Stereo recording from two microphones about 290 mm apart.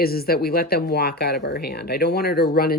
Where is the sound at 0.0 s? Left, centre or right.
Left.